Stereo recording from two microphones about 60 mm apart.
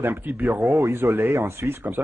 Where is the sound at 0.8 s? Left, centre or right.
Right.